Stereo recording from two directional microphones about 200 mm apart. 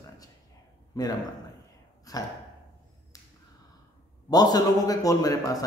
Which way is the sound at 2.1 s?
15° left (ahead or behind).